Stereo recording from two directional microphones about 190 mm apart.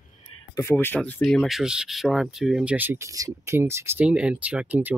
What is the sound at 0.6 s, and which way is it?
Speech, 10° left (ahead or behind).